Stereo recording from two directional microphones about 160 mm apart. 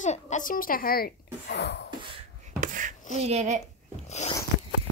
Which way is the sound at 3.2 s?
45° right (ahead or behind).